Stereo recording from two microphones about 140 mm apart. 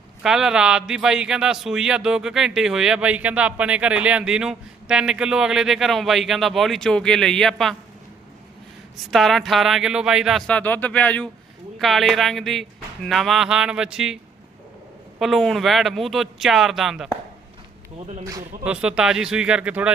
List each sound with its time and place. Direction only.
0.2 s speech: 5° right (ahead or behind)
9.0 s speech: centre (ahead or behind)
15.2 s speech: centre (ahead or behind)
18.2 s speech: 25° right (ahead or behind)
18.6 s speech: 5° right (ahead or behind)